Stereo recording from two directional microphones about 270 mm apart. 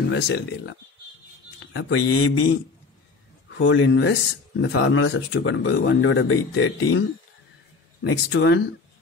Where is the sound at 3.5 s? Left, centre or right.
Left.